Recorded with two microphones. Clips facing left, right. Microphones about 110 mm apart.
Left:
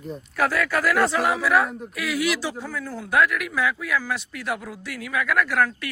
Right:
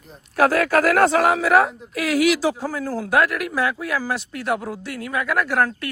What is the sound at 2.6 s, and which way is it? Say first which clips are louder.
Speech: right 6 dB; 35° right (ahead or behind).